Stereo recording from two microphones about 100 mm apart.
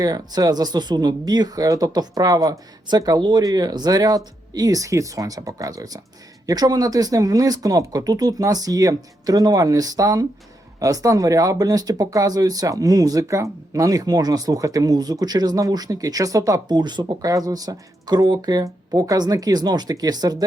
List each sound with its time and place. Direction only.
0.0 s speech: 40° right (ahead or behind)